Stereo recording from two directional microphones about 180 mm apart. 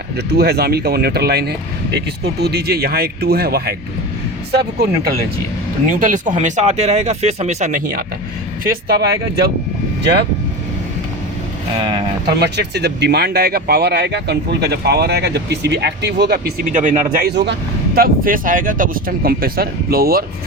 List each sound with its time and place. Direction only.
0.3 s speech: 60° right (ahead or behind)
5.9 s speech: 45° right (ahead or behind)
12.4 s speech: 65° right (ahead or behind)
16.7 s speech: 45° right (ahead or behind)